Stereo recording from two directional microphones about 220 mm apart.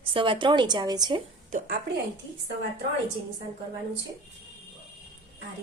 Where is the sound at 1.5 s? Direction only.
35° right (ahead or behind).